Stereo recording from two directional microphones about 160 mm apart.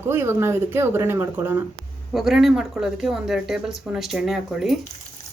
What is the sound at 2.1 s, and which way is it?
Speech, centre (ahead or behind).